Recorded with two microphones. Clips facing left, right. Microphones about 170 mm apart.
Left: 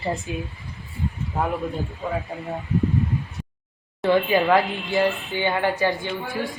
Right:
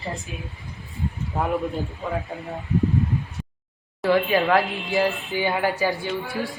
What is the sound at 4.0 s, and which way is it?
Speech, centre (ahead or behind).